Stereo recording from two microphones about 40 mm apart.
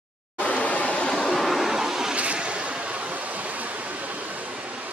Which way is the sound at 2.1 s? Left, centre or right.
Right.